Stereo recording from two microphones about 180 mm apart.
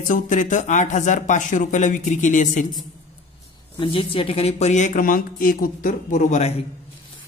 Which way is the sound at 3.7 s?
30° left (ahead or behind).